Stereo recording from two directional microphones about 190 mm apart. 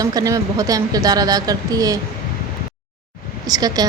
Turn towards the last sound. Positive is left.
turn(degrees=-20)  # may be behind; listen again after turning